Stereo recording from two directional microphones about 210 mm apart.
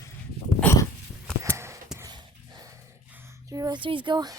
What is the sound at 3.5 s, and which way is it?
Speech, 20° right (ahead or behind).